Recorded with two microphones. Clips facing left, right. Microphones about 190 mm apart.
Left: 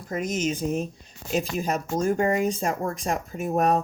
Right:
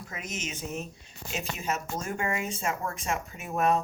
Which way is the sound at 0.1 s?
40° left (ahead or behind).